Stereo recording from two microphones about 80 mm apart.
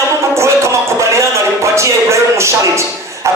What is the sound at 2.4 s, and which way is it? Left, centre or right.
Music, right.